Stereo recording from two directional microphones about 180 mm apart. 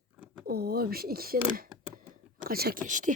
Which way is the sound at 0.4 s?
60° right (ahead or behind).